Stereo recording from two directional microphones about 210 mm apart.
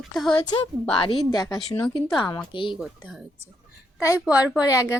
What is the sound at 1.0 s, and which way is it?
Speech, 25° left (ahead or behind).